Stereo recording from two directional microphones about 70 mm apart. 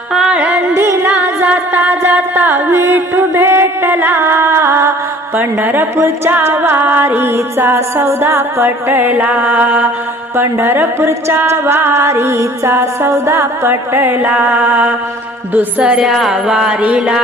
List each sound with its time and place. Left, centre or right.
0.1 s music: centre
0.7 s music: right
12.1 s music: right
15.8 s music: centre